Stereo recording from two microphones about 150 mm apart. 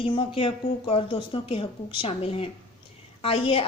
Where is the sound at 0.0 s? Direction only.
35° left (ahead or behind).